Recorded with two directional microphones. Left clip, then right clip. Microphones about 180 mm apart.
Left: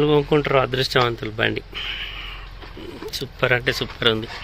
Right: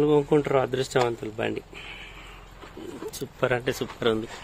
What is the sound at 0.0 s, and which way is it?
Speech, 5° right (ahead or behind).